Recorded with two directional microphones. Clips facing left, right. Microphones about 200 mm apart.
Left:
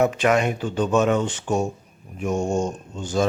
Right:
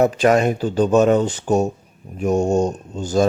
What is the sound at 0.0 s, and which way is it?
Speech, 35° right (ahead or behind).